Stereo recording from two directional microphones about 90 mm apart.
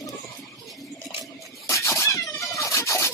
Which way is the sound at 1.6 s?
30° left (ahead or behind).